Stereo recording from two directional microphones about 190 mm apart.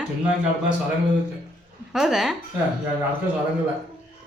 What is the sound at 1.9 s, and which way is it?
Speech, centre (ahead or behind).